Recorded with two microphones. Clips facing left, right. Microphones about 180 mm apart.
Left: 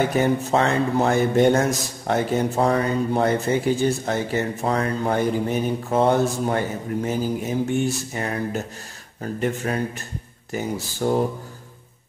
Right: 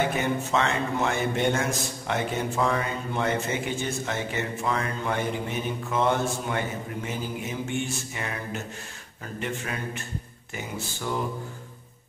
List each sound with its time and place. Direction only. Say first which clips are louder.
0.1 s a man's voice: left 6 dB; 35° left (ahead or behind)